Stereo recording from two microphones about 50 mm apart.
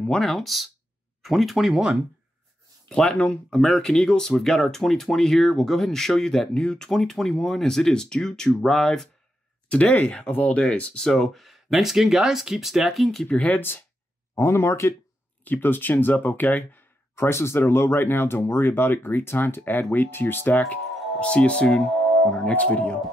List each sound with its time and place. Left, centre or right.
0.0 s speech: centre
1.7 s speech: centre
2.9 s speech: centre
3.6 s speech: centre
9.7 s speech: left
11.0 s speech: centre
13.3 s speech: left
13.6 s speech: left
14.3 s speech: left
15.4 s speech: left
17.1 s speech: left
20.7 s speech: left